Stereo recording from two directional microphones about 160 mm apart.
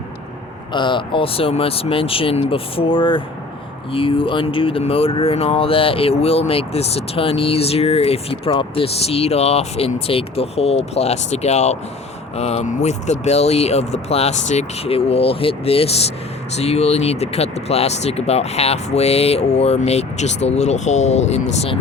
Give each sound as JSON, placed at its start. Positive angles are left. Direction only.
{"t": 0.7, "sound": "speech", "side_deg": 30}